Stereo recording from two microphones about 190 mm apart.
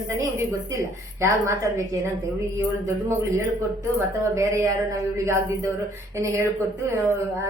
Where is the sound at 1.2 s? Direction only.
15° right (ahead or behind).